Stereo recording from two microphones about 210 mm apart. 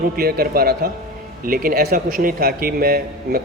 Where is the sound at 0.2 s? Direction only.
45° right (ahead or behind).